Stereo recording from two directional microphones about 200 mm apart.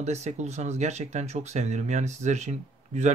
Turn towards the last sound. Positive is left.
turn(degrees=-35)  # may be behind; listen again after turning